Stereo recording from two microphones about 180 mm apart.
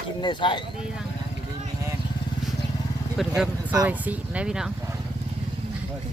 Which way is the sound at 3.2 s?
5° right (ahead or behind).